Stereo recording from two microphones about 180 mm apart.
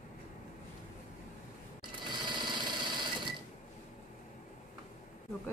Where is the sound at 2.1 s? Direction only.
25° right (ahead or behind).